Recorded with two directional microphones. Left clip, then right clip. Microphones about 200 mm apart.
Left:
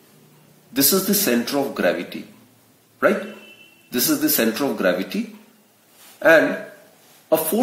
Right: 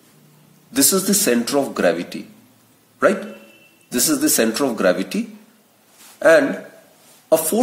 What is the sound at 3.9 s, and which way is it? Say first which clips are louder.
Speech: right 2 dB; 40° right (ahead or behind).